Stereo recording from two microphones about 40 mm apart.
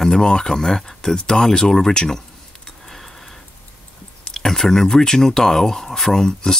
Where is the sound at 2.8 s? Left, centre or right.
Centre.